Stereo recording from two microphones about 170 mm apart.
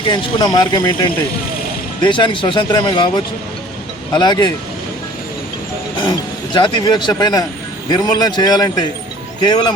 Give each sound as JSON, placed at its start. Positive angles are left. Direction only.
{"t": 0.1, "sound": "speech", "side_deg": 25}
{"t": 2.0, "sound": "speech", "side_deg": 30}
{"t": 4.1, "sound": "speech", "side_deg": 25}
{"t": 6.0, "sound": "speech", "side_deg": 25}